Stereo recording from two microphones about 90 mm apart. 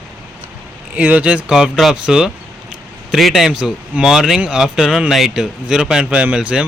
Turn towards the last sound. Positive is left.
turn(degrees=-10)  # may be behind; listen again after turning